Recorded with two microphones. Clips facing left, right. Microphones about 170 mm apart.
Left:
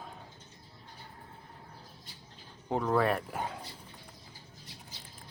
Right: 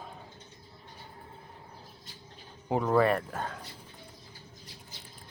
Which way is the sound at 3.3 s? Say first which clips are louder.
Even; 10° left (ahead or behind).